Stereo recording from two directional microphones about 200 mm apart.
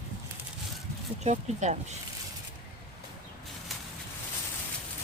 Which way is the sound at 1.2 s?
35° right (ahead or behind).